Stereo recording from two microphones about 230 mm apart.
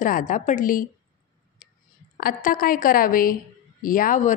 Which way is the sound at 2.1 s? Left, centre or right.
Left.